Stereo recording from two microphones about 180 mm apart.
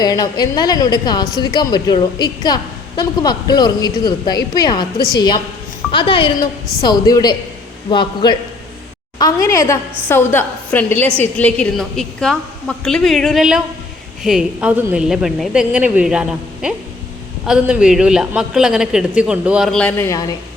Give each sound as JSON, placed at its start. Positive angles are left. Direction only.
{"t": 0.0, "sound": "a woman's voice", "side_deg": 20}